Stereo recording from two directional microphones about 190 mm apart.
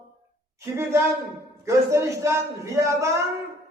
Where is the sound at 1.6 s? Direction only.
15° right (ahead or behind).